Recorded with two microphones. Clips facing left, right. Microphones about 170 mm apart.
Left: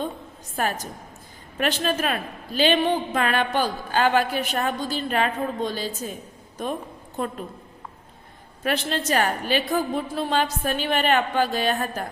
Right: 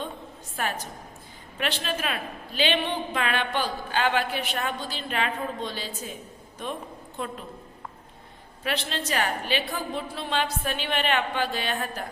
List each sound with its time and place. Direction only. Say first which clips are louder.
0.5 s a woman's voice: left 4 dB; 40° left (ahead or behind)
7.2 s a woman's voice: left 5 dB; 45° left (ahead or behind)
8.6 s a woman's voice: left 5 dB; 45° left (ahead or behind)